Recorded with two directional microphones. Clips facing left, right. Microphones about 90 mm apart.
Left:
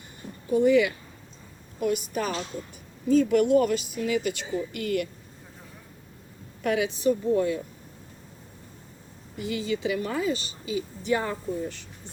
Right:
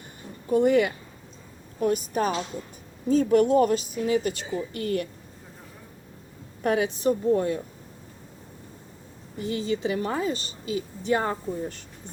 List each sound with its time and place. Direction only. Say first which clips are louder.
0.5 s a woman's voice: even; 50° right (ahead or behind)
6.6 s a woman's voice: right 2 dB; 40° right (ahead or behind)
9.4 s a woman's voice: right 1 dB; 35° right (ahead or behind)